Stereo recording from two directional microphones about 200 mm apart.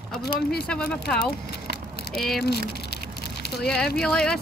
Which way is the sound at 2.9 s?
55° left (ahead or behind).